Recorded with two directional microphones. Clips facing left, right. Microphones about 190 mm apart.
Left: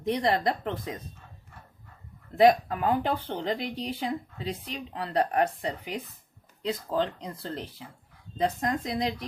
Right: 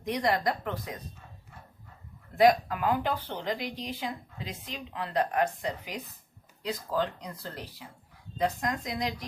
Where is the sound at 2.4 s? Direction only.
25° left (ahead or behind).